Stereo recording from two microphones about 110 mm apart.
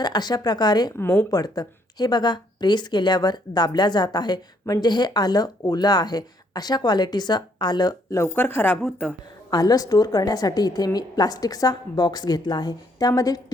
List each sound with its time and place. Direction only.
0.0 s a woman's voice: 40° left (ahead or behind)
8.2 s speech: 20° left (ahead or behind)
9.5 s a woman's voice: 35° left (ahead or behind)